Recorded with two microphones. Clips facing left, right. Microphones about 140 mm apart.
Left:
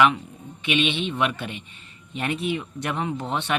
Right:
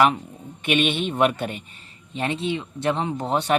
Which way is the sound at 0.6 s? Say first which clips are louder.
Right 2 dB; 50° right (ahead or behind).